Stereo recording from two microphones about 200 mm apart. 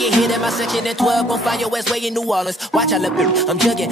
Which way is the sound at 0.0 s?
Centre (ahead or behind).